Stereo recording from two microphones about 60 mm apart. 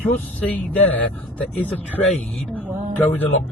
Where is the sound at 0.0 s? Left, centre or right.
Left.